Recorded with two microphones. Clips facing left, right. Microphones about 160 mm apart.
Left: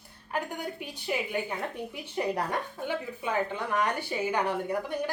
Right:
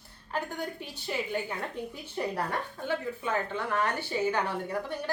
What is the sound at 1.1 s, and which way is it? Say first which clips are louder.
Speech: left 2 dB; 10° left (ahead or behind).